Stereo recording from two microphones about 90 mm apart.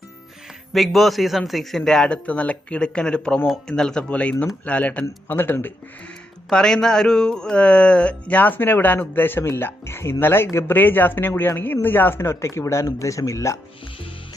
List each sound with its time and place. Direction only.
0.7 s speech: centre (ahead or behind)
3.4 s speech: centre (ahead or behind); by 5.5 s 20° left (ahead or behind)
6.5 s speech: 10° left (ahead or behind); by 13.6 s 35° left (ahead or behind)